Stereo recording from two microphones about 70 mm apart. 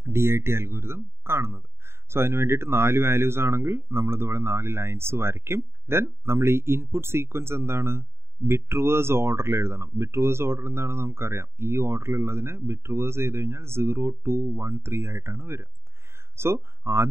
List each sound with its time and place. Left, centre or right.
0.0 s speech: right